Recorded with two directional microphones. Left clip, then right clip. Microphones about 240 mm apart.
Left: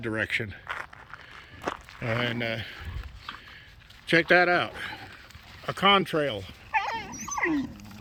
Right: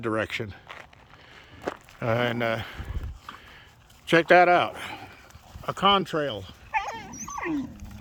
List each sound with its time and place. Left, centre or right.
0.0 s speech: centre
4.0 s speech: centre
6.7 s dog: right